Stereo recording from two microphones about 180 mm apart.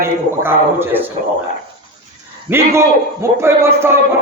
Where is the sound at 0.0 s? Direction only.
10° right (ahead or behind).